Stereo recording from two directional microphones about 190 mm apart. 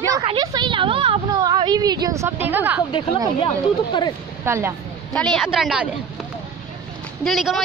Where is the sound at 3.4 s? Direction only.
25° left (ahead or behind).